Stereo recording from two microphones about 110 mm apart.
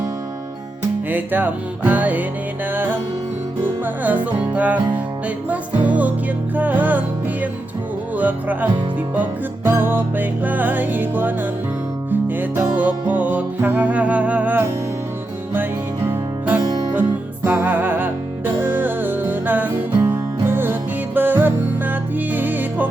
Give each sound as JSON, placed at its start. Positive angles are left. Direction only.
{"t": 1.1, "sound": "music", "side_deg": -15}
{"t": 8.1, "sound": "music", "side_deg": -15}
{"t": 12.4, "sound": "music", "side_deg": -15}
{"t": 16.0, "sound": "music", "side_deg": -15}